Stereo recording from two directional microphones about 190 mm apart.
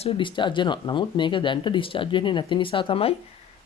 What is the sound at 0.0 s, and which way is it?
Speech, 30° left (ahead or behind).